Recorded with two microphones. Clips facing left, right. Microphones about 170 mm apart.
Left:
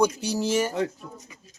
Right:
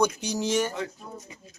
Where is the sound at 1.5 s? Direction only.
40° left (ahead or behind).